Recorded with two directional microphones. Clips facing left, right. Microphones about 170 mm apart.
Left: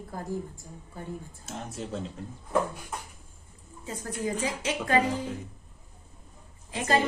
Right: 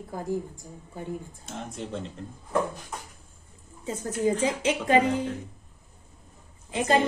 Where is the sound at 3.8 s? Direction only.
25° right (ahead or behind).